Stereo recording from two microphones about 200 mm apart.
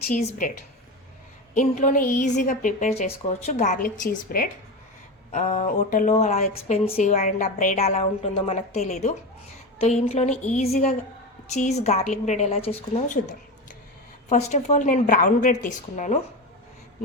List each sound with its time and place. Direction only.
0.1 s a woman's voice: 40° left (ahead or behind)
1.5 s a woman's voice: 40° left (ahead or behind)
14.3 s a woman's voice: 35° left (ahead or behind)